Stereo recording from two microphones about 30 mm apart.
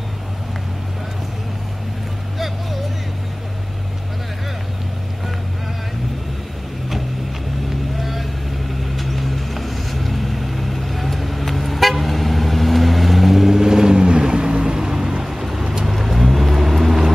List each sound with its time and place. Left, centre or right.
8.0 s vehicle: centre
15.9 s vehicle: centre